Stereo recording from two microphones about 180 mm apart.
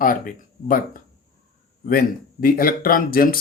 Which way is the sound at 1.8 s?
50° left (ahead or behind).